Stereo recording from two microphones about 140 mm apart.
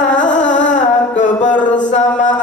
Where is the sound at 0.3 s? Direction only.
65° left (ahead or behind).